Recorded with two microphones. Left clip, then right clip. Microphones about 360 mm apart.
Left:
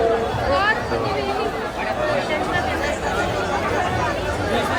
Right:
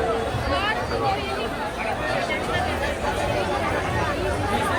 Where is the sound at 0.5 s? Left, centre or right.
Left.